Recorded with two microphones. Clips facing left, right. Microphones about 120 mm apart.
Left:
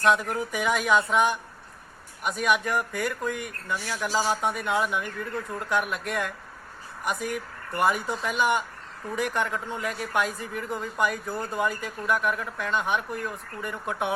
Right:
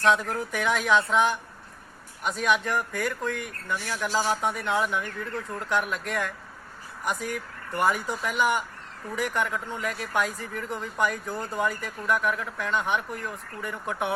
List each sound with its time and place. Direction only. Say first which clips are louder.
0.0 s speech: even; 5° left (ahead or behind)